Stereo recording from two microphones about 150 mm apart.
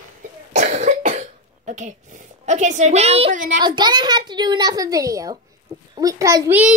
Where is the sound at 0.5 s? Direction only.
50° right (ahead or behind).